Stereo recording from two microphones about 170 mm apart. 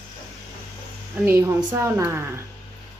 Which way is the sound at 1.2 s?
15° right (ahead or behind).